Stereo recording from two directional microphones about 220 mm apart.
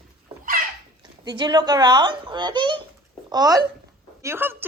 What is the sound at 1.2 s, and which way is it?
A woman's voice, 20° right (ahead or behind).